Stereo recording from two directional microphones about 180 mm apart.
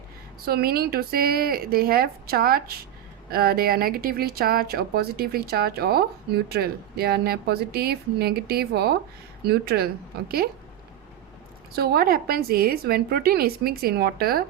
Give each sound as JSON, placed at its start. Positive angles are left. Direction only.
{"t": 0.4, "sound": "speech", "side_deg": -55}
{"t": 11.7, "sound": "speech", "side_deg": -55}